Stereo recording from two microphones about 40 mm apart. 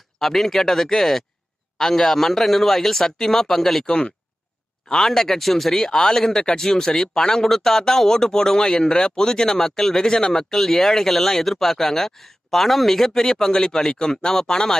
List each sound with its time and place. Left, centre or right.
0.2 s speech: centre
3.8 s speech: left
4.8 s speech: centre